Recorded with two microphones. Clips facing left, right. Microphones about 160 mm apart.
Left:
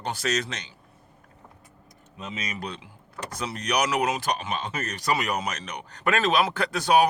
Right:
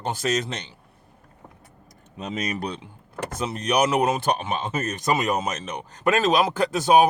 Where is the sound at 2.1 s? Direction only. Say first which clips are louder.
Right 6 dB; 40° right (ahead or behind).